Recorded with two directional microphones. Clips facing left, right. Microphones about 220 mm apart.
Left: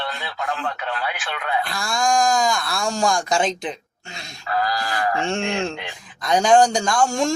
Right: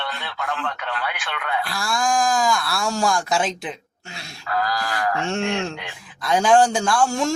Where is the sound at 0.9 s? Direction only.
Centre (ahead or behind).